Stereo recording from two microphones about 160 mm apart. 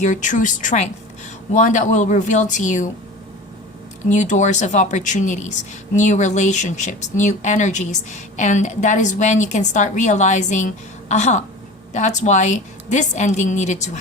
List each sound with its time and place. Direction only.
0.0 s speech: 50° left (ahead or behind)
4.1 s speech: 50° left (ahead or behind)